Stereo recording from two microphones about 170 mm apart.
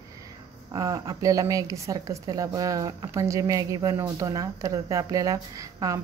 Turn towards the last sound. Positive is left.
turn(degrees=-20)  # may be behind; listen again after turning